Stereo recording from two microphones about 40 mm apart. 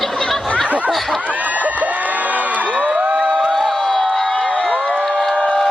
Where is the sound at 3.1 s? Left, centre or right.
Right.